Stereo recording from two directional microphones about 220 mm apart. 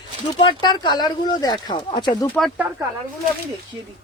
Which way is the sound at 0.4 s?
20° left (ahead or behind).